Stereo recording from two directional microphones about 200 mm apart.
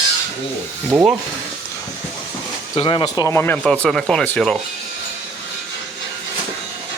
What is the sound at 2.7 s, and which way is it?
Speech, 25° left (ahead or behind).